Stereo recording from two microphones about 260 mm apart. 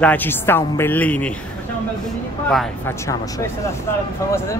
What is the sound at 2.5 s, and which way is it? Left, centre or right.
Speech, centre.